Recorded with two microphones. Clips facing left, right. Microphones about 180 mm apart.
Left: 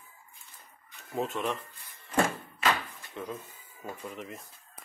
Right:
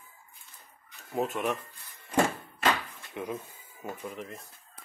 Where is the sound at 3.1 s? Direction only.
10° right (ahead or behind).